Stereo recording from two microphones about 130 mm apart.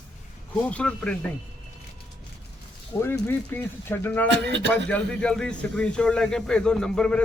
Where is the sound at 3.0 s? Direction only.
15° left (ahead or behind).